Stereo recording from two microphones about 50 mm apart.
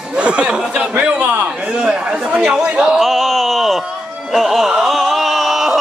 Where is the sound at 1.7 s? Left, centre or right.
Centre.